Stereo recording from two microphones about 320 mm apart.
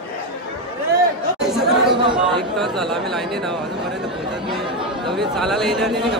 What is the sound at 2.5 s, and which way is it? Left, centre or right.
Speech, centre.